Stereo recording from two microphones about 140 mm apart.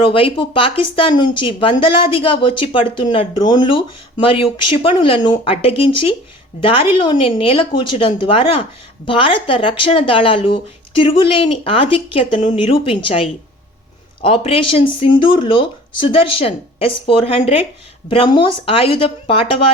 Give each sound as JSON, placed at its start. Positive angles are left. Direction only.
{"t": 0.0, "sound": "speech", "side_deg": 40}